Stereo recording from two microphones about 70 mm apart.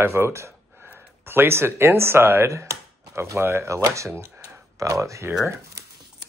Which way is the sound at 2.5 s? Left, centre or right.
Right.